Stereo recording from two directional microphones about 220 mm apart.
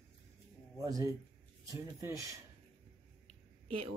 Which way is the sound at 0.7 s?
15° right (ahead or behind).